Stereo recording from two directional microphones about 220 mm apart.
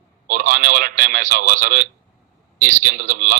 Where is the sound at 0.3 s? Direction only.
40° right (ahead or behind).